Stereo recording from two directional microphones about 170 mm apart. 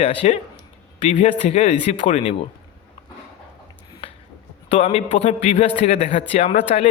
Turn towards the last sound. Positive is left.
turn(degrees=35)  # may be behind; listen again after turning